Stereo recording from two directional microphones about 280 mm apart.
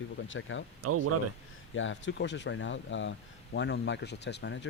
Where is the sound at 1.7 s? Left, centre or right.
Left.